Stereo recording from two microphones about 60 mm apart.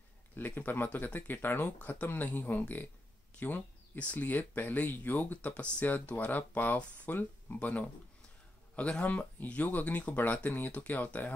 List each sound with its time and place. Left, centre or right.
0.4 s speech: left